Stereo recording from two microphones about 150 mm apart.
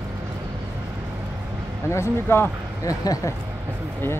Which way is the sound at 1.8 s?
20° left (ahead or behind).